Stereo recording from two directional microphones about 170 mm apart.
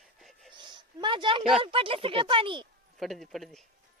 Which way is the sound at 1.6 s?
30° right (ahead or behind).